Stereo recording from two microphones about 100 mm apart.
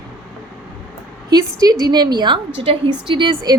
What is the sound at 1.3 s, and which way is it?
A woman's voice, 40° right (ahead or behind).